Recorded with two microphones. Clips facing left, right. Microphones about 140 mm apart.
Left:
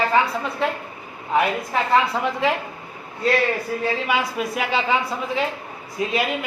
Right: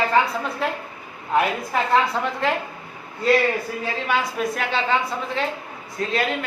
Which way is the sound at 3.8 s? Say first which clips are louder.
Left 3 dB; 5° left (ahead or behind).